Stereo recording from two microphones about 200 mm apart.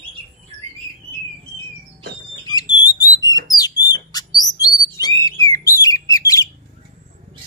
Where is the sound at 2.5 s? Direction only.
20° left (ahead or behind).